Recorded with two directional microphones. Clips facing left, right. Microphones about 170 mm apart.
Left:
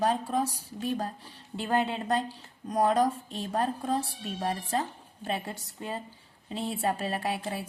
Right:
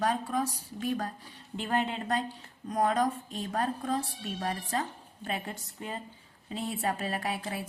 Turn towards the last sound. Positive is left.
turn(degrees=30)  # may be behind; listen again after turning